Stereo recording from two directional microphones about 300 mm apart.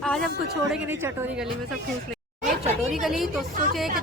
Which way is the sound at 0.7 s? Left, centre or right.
Centre.